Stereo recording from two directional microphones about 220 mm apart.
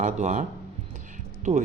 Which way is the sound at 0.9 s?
35° right (ahead or behind).